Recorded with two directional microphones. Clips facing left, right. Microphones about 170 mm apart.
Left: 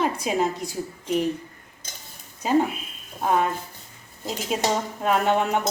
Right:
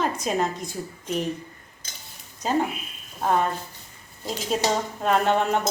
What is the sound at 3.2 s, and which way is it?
Speech, 5° left (ahead or behind).